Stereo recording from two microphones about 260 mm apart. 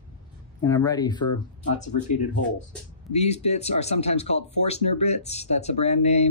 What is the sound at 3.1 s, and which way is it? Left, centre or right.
Speech, left.